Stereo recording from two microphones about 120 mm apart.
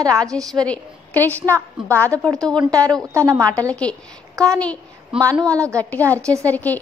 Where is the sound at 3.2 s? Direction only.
25° right (ahead or behind).